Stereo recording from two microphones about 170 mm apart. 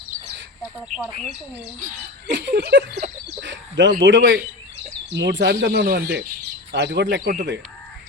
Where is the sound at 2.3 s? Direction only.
90° right.